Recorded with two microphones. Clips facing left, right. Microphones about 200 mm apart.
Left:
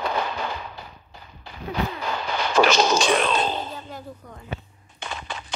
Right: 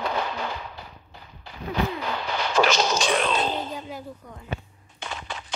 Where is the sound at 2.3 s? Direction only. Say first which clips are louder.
Left 3 dB; 55° left (ahead or behind); by 3.3 s 75° left (ahead or behind).